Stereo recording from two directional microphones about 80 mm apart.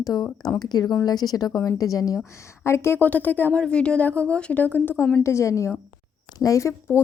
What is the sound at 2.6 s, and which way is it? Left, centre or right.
Speech, left.